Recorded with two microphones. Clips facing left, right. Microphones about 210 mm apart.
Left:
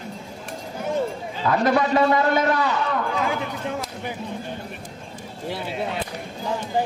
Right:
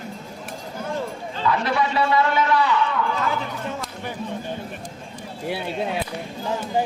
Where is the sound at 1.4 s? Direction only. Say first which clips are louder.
Left 3 dB; 45° left (ahead or behind).